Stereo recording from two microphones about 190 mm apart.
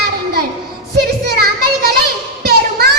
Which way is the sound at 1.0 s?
55° right (ahead or behind).